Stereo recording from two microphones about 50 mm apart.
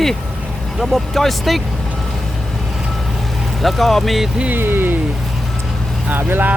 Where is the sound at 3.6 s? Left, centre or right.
Centre.